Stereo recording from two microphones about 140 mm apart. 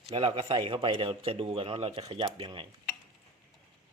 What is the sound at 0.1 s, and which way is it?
A man's voice, 40° right (ahead or behind).